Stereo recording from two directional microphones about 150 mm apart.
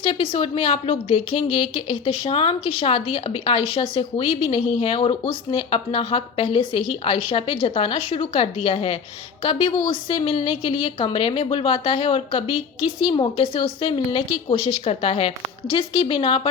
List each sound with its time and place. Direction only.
0.0 s a woman's voice: 35° left (ahead or behind)